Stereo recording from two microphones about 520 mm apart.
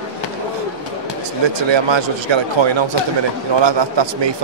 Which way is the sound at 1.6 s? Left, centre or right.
Right.